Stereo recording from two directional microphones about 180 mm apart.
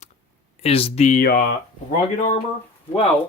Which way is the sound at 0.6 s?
35° left (ahead or behind).